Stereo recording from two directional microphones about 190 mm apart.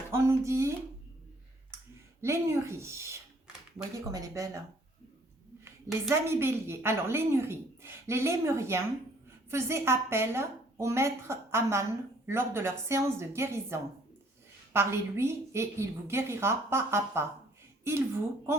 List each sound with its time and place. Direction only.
0.1 s a woman's voice: 15° right (ahead or behind)
2.2 s a woman's voice: 15° right (ahead or behind)